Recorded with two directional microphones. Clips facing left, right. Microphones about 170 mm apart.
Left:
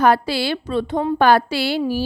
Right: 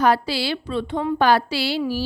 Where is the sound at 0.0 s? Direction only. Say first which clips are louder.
Left 3 dB; 55° left (ahead or behind).